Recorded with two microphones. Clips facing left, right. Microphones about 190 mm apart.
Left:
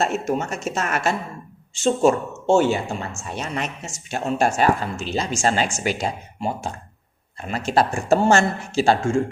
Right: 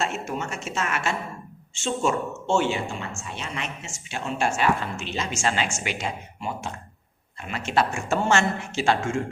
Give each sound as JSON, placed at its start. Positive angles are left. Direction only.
{"t": 0.0, "sound": "speech", "side_deg": 40}